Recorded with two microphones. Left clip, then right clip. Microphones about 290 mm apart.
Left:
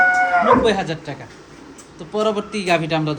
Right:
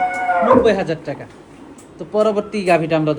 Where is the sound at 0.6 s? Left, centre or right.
Centre.